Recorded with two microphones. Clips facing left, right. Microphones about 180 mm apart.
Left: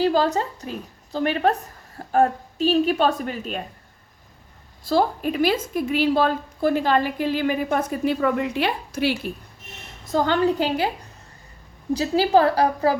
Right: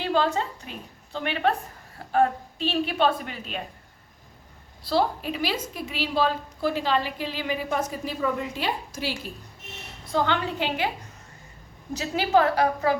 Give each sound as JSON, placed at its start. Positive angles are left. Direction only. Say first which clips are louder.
{"t": 0.0, "sound": "a woman's voice", "louder": "left 4 dB", "side_deg": 40}
{"t": 4.8, "sound": "a woman's voice", "louder": "left 4 dB", "side_deg": 45}
{"t": 10.1, "sound": "a woman's voice", "louder": "left 6 dB", "side_deg": 40}
{"t": 11.9, "sound": "a woman's voice", "louder": "left 4 dB", "side_deg": 35}